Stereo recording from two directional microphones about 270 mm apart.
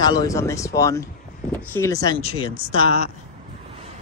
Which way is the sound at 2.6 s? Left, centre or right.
Right.